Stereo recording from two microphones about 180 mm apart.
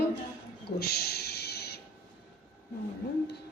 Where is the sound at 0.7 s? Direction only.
60° left (ahead or behind).